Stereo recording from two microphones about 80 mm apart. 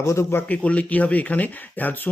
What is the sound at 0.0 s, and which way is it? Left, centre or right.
Speech, left.